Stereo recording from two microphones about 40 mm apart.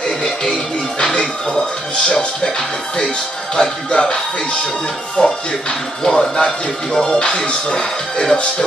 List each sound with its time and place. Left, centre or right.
0.0 s music: centre
1.5 s speech: centre
3.5 s speech: left
5.2 s speech: centre